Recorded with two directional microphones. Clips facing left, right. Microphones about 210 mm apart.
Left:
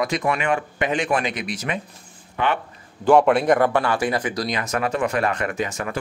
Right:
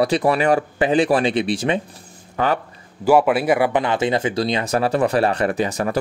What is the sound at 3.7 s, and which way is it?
Speech, 20° right (ahead or behind).